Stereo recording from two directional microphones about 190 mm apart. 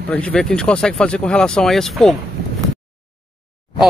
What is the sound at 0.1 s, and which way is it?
Speech, 5° left (ahead or behind).